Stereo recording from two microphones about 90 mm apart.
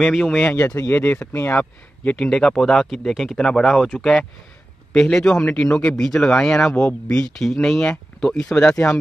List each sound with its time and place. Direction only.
0.2 s a man's voice: 10° left (ahead or behind)
0.7 s speech: 25° left (ahead or behind)
2.1 s speech: 10° left (ahead or behind)
4.9 s a man's voice: 5° left (ahead or behind)